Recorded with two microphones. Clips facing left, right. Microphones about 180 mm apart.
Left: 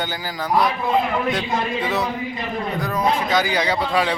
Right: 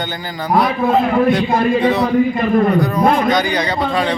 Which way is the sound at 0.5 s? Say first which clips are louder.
Right 5 dB; 50° right (ahead or behind).